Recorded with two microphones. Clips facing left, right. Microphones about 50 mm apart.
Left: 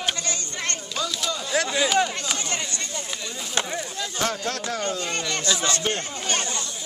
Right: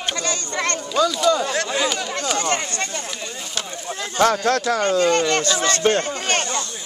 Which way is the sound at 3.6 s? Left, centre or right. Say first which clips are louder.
Left 4 dB; left.